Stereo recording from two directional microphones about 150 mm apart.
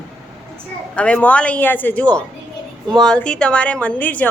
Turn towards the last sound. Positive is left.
turn(degrees=10)  # may be behind; listen again after turning